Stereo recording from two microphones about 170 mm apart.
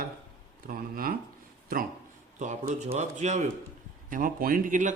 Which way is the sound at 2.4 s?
45° right (ahead or behind).